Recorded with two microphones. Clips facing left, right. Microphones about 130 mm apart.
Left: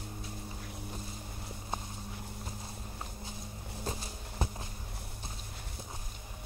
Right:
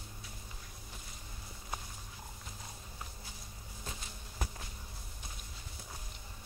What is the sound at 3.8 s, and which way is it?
Walk, 30° left (ahead or behind).